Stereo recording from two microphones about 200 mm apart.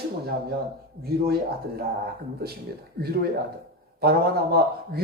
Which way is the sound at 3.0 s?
50° right (ahead or behind).